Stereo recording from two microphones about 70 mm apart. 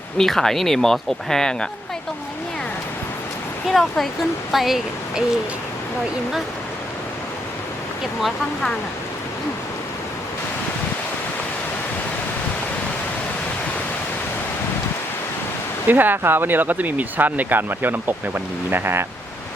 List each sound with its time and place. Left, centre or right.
0.2 s speech: centre
3.7 s speech: centre
15.9 s speech: right